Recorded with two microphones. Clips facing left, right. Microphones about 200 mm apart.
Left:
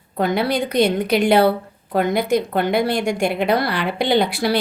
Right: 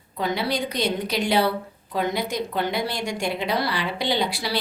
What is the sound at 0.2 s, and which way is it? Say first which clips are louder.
A woman's voice: left 6 dB; 55° left (ahead or behind).